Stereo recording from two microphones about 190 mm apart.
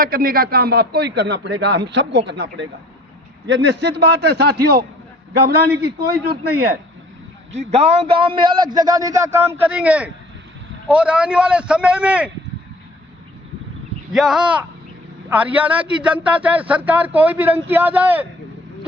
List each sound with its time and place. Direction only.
0.0 s a man's voice: 50° right (ahead or behind)
7.6 s a man's voice: 35° right (ahead or behind); by 12.3 s 5° right (ahead or behind)
14.1 s a man's voice: centre (ahead or behind)